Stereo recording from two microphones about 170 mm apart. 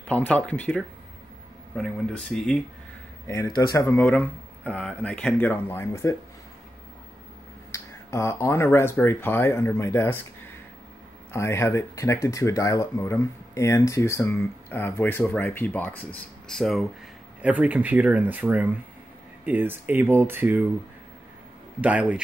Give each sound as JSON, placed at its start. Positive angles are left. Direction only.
{"t": 0.0, "sound": "speech", "side_deg": 5}
{"t": 3.3, "sound": "speech", "side_deg": 20}
{"t": 7.7, "sound": "speech", "side_deg": 15}
{"t": 17.4, "sound": "speech", "side_deg": -10}
{"t": 21.8, "sound": "speech", "side_deg": -5}